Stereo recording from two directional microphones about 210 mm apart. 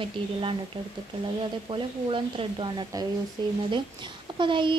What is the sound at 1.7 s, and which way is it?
Speech, 25° right (ahead or behind).